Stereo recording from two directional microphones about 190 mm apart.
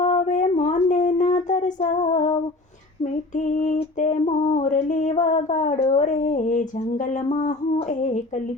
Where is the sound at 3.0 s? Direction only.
40° left (ahead or behind).